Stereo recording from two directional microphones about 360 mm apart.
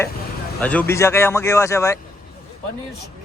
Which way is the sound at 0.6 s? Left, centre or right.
Centre.